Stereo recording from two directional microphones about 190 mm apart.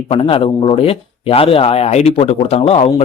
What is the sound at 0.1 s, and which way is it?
Speech, 30° left (ahead or behind).